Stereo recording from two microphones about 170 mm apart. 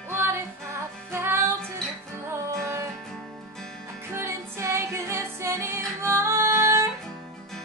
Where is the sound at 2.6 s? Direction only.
15° right (ahead or behind).